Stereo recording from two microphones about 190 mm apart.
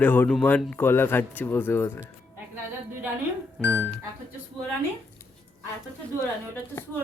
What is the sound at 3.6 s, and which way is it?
Speech, 5° left (ahead or behind).